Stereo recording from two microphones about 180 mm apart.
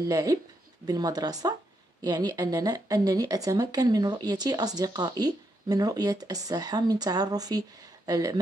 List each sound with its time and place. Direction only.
0.1 s speech: 20° right (ahead or behind)